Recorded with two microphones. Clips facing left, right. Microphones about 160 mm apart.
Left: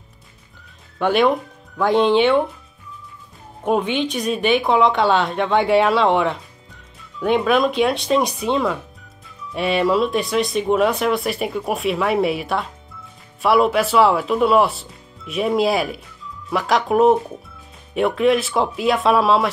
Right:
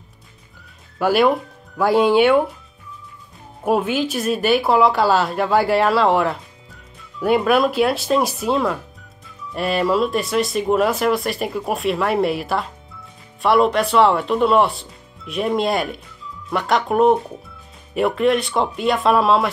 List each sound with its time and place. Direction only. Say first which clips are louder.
0.9 s speech: right 1 dB; 5° right (ahead or behind)
3.6 s speech: right 1 dB; 5° right (ahead or behind)